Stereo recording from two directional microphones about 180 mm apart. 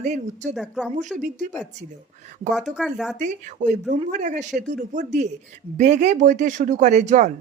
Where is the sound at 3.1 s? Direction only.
45° right (ahead or behind).